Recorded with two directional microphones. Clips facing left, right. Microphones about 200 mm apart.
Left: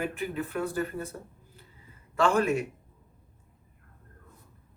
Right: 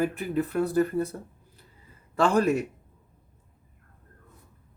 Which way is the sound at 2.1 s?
35° right (ahead or behind).